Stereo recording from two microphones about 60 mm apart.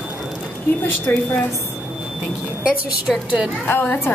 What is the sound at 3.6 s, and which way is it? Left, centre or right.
Speech, left.